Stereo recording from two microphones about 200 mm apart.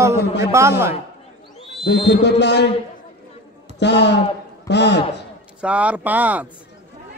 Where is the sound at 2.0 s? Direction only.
60° left (ahead or behind).